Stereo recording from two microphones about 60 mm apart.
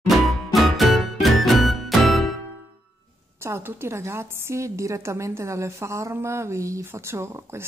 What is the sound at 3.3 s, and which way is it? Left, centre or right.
A woman's voice, right.